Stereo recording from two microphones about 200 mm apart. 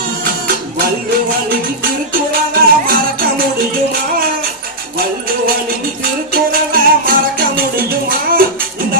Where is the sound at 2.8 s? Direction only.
45° right (ahead or behind).